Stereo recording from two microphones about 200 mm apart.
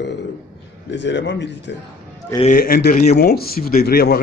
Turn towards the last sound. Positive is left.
turn(degrees=50)  # may be behind; listen again after turning